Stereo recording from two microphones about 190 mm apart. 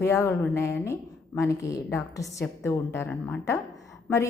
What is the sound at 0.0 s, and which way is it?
A woman's voice, 15° left (ahead or behind).